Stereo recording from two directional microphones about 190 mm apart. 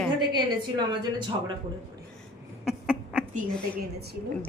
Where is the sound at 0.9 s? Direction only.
25° right (ahead or behind).